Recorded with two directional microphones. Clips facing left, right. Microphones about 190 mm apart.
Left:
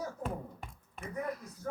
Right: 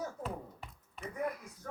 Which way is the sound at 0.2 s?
50° left (ahead or behind).